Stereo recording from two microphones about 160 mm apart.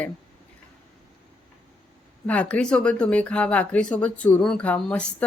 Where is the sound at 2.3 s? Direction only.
10° left (ahead or behind).